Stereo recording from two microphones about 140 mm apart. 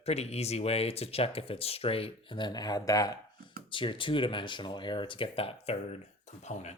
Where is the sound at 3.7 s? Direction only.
35° left (ahead or behind).